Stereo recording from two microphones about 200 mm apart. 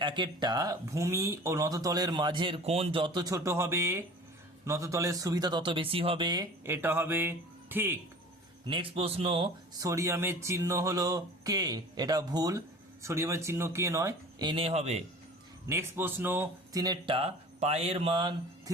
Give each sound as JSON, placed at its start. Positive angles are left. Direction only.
{"t": 0.0, "sound": "speech", "side_deg": -25}
{"t": 8.6, "sound": "speech", "side_deg": -25}
{"t": 15.7, "sound": "speech", "side_deg": -10}